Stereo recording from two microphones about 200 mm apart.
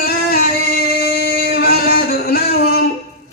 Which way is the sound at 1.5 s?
50° left (ahead or behind).